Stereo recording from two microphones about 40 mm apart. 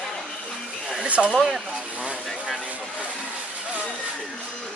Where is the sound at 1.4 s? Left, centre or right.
Centre.